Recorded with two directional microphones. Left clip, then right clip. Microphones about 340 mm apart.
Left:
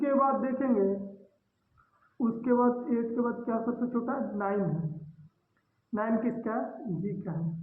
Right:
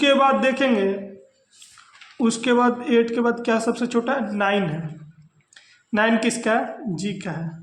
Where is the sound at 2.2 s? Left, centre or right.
Right.